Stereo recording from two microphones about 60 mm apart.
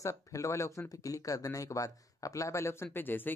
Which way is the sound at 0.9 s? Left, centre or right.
Left.